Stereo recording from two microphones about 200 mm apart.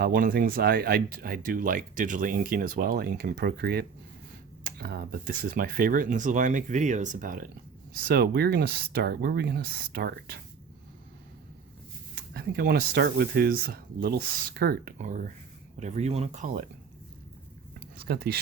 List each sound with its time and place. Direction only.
0.0 s speech: 45° right (ahead or behind)
12.1 s speech: 50° right (ahead or behind)
14.9 s speech: 40° right (ahead or behind)
18.0 s speech: 55° right (ahead or behind)